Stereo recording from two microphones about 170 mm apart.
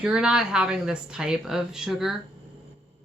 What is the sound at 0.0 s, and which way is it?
Speech, 5° right (ahead or behind).